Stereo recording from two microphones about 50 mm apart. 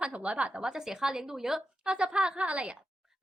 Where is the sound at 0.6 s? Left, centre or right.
Centre; by 2.7 s right.